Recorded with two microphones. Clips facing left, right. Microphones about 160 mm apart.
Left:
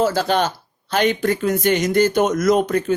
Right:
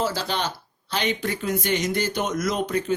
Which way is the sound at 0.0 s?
50° left (ahead or behind).